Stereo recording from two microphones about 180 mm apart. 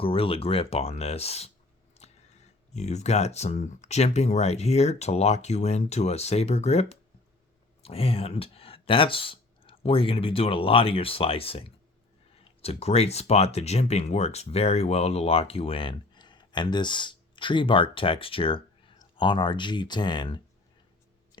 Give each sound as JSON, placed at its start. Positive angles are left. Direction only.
{"t": 0.0, "sound": "speech", "side_deg": 30}
{"t": 2.0, "sound": "chewing", "side_deg": 35}
{"t": 2.7, "sound": "speech", "side_deg": 40}